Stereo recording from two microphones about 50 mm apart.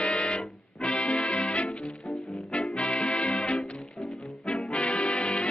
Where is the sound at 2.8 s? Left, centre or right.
Centre.